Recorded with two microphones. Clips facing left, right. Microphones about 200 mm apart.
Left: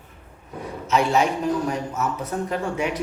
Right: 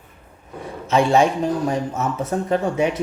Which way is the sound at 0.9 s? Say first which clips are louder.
Right 4 dB; 30° right (ahead or behind).